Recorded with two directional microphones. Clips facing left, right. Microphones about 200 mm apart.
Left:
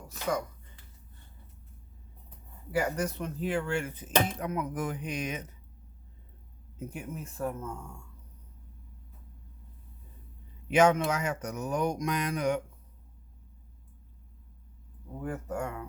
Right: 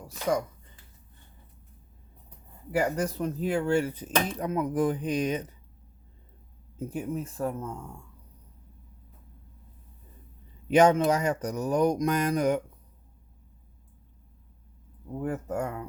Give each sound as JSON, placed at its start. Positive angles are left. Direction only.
{"t": 2.7, "sound": "speech", "side_deg": -35}
{"t": 6.7, "sound": "speech", "side_deg": -30}
{"t": 10.7, "sound": "speech", "side_deg": -35}
{"t": 15.2, "sound": "speech", "side_deg": -35}